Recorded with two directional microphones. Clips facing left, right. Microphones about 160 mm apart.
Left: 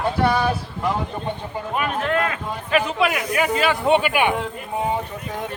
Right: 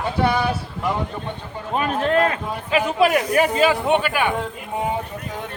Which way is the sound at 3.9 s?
10° left (ahead or behind).